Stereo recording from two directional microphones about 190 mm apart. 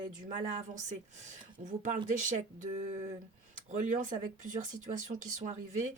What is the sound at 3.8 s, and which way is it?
Speech, 45° right (ahead or behind).